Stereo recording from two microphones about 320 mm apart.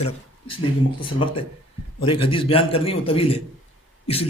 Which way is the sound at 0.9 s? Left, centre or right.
Centre.